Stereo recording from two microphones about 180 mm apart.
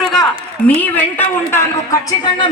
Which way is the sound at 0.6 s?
10° left (ahead or behind).